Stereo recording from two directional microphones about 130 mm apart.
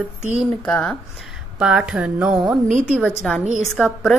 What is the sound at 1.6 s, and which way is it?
Speech, 5° right (ahead or behind).